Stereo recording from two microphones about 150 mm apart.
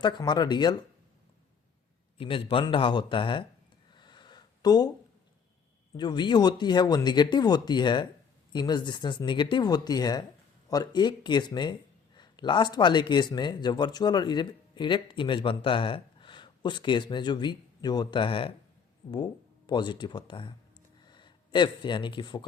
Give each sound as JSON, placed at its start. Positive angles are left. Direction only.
{"t": 0.0, "sound": "speech", "side_deg": 30}
{"t": 2.1, "sound": "speech", "side_deg": 35}
{"t": 3.9, "sound": "a sound", "side_deg": 30}
{"t": 6.0, "sound": "speech", "side_deg": 30}